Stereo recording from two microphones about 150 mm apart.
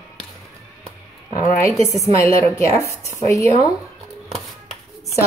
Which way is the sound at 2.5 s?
20° left (ahead or behind).